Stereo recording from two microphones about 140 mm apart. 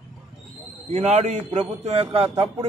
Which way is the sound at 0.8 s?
50° right (ahead or behind).